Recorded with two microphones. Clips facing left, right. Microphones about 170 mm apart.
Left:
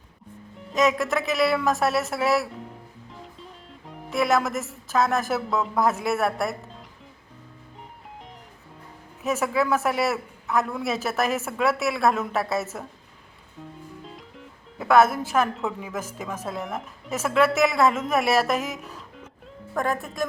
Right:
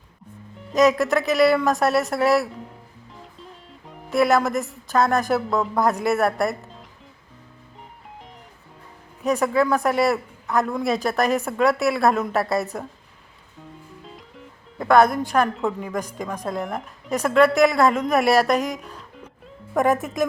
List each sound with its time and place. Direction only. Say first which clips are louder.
0.7 s a man's voice: right 5 dB; centre (ahead or behind)
9.2 s a man's voice: right 4 dB; 5° left (ahead or behind)
14.0 s speech: even; centre (ahead or behind)
19.7 s speech: right 6 dB; 20° right (ahead or behind)